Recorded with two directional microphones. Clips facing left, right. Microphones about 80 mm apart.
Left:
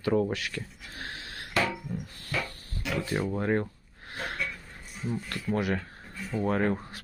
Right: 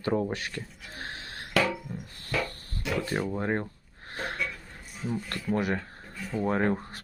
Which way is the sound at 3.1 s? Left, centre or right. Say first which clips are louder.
Left 2 dB; right.